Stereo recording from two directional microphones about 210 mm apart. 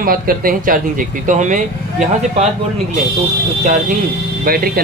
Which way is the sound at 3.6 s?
35° right (ahead or behind).